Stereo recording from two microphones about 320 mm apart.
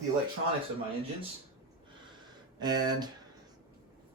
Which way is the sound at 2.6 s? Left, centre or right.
Centre.